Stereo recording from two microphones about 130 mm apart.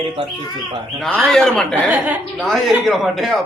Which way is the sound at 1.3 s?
5° left (ahead or behind).